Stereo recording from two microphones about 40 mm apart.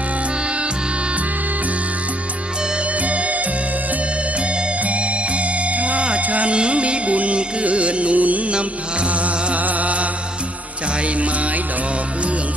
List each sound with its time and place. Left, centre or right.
3.0 s music: right
4.8 s music: right